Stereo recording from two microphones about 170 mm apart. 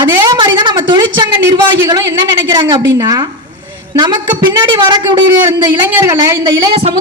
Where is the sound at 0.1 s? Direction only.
20° right (ahead or behind).